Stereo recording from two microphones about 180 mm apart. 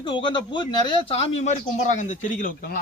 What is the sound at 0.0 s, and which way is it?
A man's voice, 25° left (ahead or behind).